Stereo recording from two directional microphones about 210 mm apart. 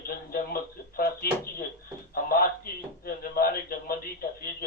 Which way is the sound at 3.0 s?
45° left (ahead or behind).